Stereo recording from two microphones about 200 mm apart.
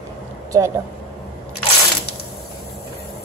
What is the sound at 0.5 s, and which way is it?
Speech, 15° right (ahead or behind).